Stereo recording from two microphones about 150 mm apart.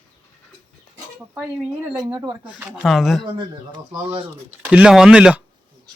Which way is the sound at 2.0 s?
30° right (ahead or behind).